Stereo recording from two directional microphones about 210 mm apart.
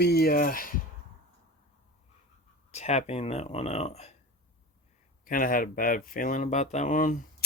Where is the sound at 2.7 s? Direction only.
30° left (ahead or behind).